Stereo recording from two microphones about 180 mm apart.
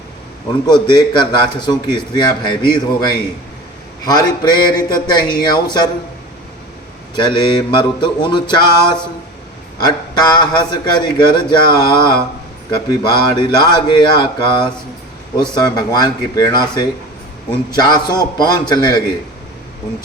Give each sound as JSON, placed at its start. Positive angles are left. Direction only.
{"t": 0.7, "sound": "a man's voice", "side_deg": 25}
{"t": 7.2, "sound": "a man's voice", "side_deg": 25}